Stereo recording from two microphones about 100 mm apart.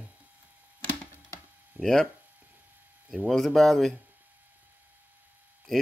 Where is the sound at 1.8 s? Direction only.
5° left (ahead or behind).